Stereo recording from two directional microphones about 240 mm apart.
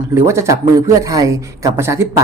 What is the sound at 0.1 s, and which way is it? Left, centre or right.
A woman's voice, centre.